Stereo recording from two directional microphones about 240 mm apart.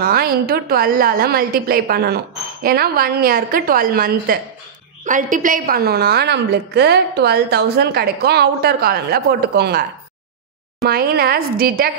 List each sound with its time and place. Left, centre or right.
0.0 s a woman's voice: right